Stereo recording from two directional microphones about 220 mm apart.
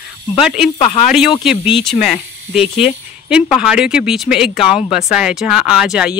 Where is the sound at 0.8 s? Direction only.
25° left (ahead or behind).